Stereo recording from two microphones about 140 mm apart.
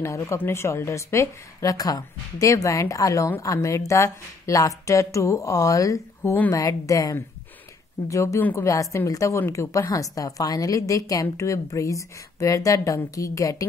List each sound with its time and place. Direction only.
0.0 s a woman's voice: 20° left (ahead or behind)